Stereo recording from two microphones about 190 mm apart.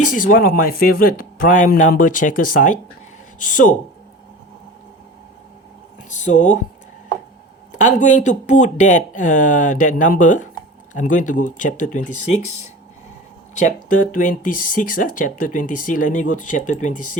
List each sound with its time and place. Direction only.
0.1 s speech: 45° left (ahead or behind)
6.1 s speech: 40° left (ahead or behind)
7.7 s speech: 40° left (ahead or behind)